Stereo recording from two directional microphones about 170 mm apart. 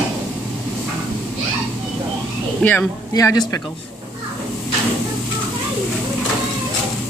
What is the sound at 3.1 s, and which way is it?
Speech, 20° left (ahead or behind).